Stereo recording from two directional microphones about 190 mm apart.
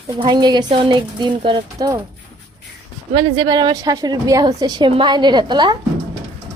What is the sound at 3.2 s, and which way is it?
A woman's voice, 25° right (ahead or behind).